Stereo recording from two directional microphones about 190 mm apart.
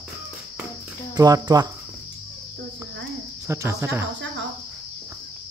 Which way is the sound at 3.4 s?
15° right (ahead or behind).